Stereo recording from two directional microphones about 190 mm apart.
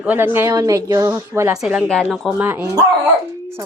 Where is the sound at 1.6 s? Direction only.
Centre (ahead or behind).